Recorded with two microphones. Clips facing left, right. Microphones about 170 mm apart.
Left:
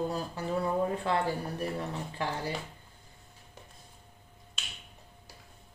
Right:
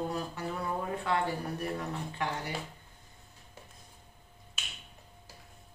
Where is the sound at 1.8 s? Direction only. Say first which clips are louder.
Left 1 dB; 30° left (ahead or behind).